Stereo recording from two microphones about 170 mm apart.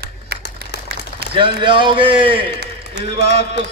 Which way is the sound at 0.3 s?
65° right (ahead or behind).